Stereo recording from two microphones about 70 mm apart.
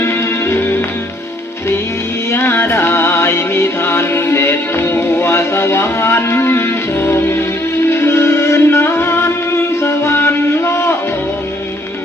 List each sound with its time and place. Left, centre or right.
0.0 s music: left
2.3 s music: left